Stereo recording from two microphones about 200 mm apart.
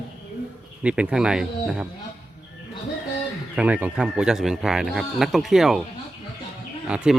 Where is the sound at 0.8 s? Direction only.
5° right (ahead or behind).